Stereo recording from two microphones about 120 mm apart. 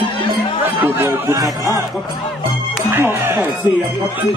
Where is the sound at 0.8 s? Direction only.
20° right (ahead or behind).